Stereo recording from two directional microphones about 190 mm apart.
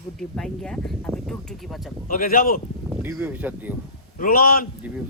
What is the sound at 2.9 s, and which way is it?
Speech, 10° right (ahead or behind).